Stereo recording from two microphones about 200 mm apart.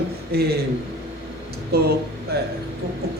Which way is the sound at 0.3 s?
50° right (ahead or behind).